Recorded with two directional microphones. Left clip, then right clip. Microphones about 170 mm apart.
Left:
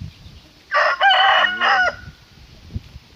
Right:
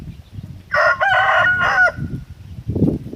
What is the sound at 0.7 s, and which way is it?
Chicken, 5° left (ahead or behind).